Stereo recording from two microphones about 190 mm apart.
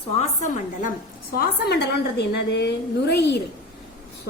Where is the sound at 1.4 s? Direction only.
60° left (ahead or behind).